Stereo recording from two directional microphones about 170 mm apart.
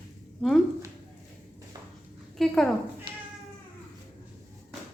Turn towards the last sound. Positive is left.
turn(degrees=-25)  # may be behind; listen again after turning